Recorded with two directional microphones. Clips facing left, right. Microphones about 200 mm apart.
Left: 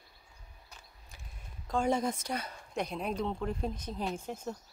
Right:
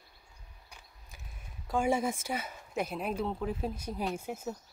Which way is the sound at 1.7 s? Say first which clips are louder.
Right 1 dB; 10° right (ahead or behind).